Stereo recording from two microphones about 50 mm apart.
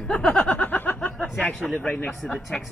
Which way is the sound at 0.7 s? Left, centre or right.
Left.